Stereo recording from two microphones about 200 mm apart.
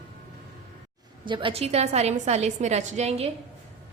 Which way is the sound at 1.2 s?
25° right (ahead or behind).